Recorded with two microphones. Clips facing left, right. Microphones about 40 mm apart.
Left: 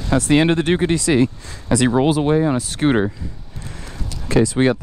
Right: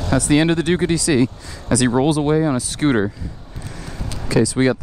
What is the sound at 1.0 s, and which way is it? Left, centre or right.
Speech, left.